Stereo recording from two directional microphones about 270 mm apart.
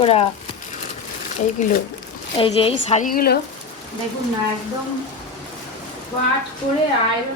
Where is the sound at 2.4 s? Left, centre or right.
Left.